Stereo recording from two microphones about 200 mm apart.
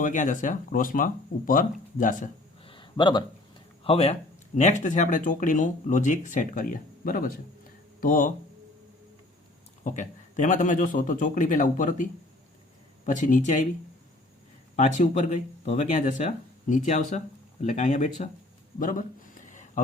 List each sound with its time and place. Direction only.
0.0 s speech: 40° left (ahead or behind)
2.6 s a sound: 25° left (ahead or behind)
3.8 s speech: 30° left (ahead or behind)
9.8 s speech: 40° left (ahead or behind)
13.1 s speech: 40° left (ahead or behind)
14.8 s speech: 35° left (ahead or behind)
18.8 s a sound: 40° left (ahead or behind)